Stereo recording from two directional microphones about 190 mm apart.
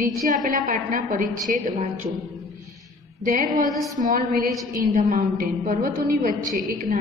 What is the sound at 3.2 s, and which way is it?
A woman's voice, 45° right (ahead or behind).